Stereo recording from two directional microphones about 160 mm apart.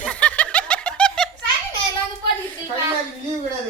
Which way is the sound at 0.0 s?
5° left (ahead or behind).